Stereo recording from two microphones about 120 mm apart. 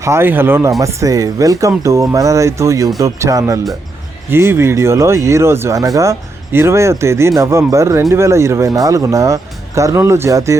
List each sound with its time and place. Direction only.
0.0 s speech: 20° right (ahead or behind)
0.8 s speech: 30° right (ahead or behind)